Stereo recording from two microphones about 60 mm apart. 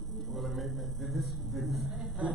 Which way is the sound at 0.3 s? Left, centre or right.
Centre.